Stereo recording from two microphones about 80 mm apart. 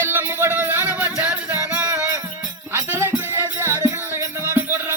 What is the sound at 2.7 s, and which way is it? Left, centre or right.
Music, right.